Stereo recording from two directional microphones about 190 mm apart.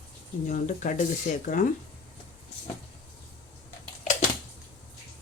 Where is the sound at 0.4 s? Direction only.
40° left (ahead or behind).